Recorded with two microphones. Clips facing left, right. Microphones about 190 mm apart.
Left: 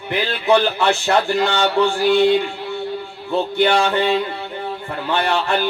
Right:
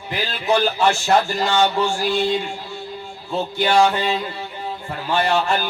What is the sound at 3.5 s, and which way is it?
Speech, 60° left (ahead or behind).